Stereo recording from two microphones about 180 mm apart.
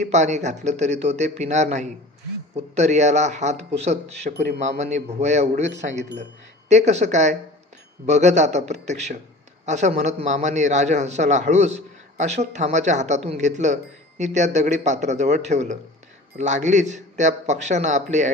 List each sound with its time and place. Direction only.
0.0 s a man's voice: 40° right (ahead or behind)